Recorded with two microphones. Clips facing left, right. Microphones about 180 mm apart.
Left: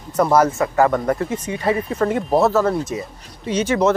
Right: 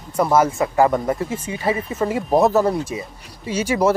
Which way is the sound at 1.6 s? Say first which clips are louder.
Left 2 dB; 5° right (ahead or behind).